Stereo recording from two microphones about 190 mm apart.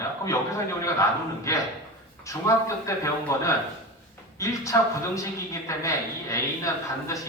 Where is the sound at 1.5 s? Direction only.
15° left (ahead or behind).